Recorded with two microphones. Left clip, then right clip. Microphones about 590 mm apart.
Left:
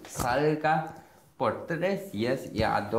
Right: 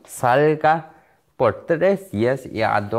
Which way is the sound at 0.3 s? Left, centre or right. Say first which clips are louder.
Right 9 dB; right.